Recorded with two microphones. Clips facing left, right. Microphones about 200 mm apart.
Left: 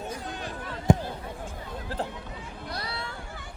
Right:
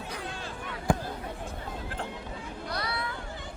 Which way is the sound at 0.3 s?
20° left (ahead or behind).